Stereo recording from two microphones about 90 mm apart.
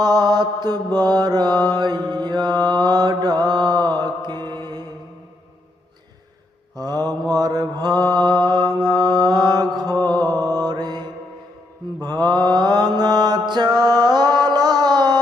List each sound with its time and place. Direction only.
0.0 s mantra: 50° right (ahead or behind)
6.7 s mantra: 45° right (ahead or behind)
12.0 s mantra: 55° right (ahead or behind)